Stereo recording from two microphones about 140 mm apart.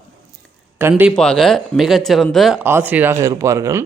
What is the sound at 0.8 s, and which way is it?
Speech, 15° right (ahead or behind).